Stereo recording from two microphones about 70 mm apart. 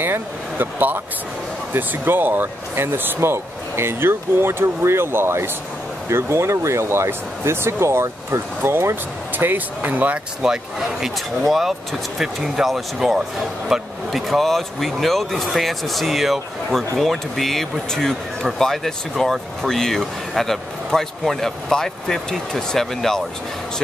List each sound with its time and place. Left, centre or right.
0.0 s speech: right
9.4 s speech: right
10.4 s a man's voice: centre
12.2 s speech: centre